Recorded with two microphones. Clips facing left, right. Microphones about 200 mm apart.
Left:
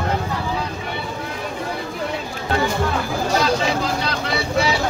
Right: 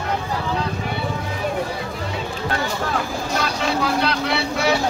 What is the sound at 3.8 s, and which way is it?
Vehicle, 60° right (ahead or behind).